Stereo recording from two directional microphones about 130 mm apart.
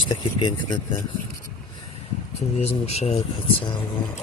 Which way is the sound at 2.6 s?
55° left (ahead or behind).